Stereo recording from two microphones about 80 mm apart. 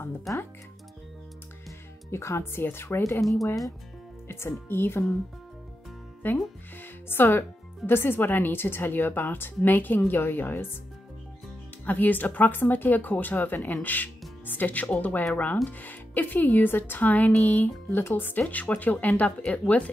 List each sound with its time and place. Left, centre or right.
2.0 s speech: left
4.3 s speech: left
6.2 s speech: left
11.8 s speech: left